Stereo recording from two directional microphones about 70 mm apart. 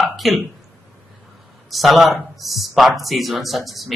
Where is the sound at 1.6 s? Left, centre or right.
Centre.